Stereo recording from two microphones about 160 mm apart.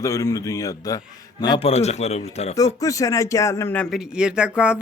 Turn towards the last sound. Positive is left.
turn(degrees=-5)  # may be behind; listen again after turning